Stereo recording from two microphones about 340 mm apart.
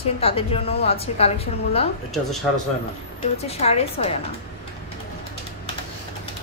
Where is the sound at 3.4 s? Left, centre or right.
Centre.